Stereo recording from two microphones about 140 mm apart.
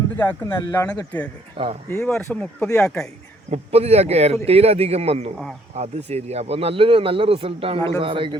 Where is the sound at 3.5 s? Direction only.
50° right (ahead or behind).